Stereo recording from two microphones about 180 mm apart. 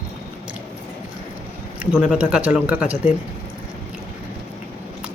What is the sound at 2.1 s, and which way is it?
Speech, 5° right (ahead or behind).